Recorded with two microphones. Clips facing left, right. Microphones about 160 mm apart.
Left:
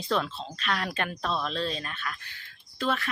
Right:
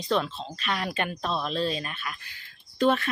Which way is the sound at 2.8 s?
20° right (ahead or behind).